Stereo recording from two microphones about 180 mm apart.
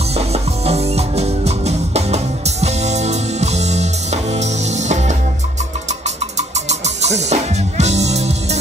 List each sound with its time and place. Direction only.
0.1 s music: 35° right (ahead or behind)